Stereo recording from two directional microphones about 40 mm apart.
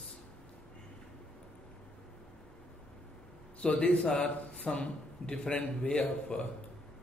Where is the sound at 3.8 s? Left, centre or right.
Left; by 5.7 s centre.